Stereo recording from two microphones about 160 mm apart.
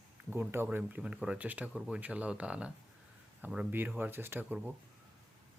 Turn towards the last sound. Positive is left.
turn(degrees=-10)  # may be behind; listen again after turning